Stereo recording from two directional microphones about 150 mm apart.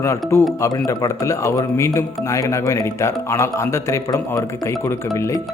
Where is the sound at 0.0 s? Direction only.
20° left (ahead or behind).